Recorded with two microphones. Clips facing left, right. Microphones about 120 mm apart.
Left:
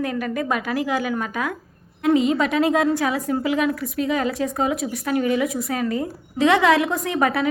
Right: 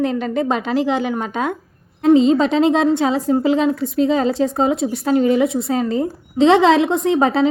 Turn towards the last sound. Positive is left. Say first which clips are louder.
# right 6 dB
turn(degrees=-25)  # may be behind; listen again after turning